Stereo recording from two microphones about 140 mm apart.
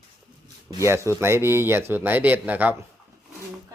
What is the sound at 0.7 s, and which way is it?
Speech, 25° right (ahead or behind).